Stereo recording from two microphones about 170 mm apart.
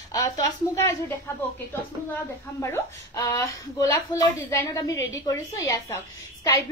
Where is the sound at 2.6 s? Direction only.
20° left (ahead or behind).